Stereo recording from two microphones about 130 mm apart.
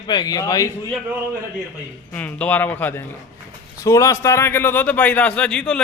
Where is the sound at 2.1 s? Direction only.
10° left (ahead or behind).